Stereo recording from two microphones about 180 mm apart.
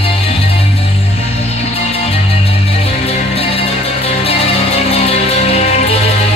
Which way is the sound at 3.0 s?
35° left (ahead or behind).